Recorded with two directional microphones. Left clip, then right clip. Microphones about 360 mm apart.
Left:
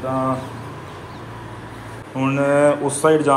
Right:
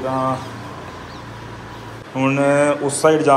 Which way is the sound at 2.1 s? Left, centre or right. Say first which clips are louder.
Right 2 dB; centre.